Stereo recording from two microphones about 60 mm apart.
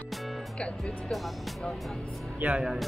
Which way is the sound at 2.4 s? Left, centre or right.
Centre.